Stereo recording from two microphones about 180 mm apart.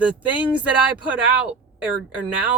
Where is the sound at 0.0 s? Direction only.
5° right (ahead or behind).